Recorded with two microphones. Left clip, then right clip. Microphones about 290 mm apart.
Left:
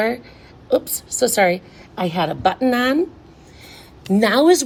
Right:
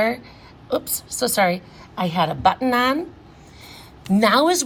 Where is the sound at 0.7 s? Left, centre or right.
Centre.